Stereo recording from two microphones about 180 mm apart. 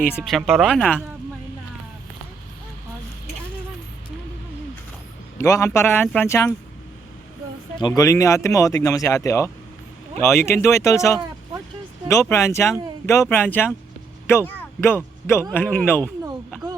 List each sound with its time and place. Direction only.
0.2 s speech: centre (ahead or behind)
5.4 s speech: 15° left (ahead or behind)
7.8 s speech: 20° left (ahead or behind)